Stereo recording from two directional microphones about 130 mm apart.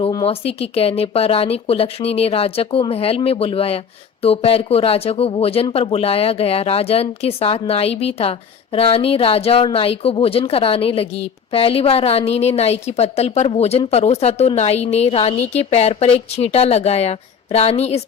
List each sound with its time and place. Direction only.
0.3 s a woman's voice: 50° left (ahead or behind)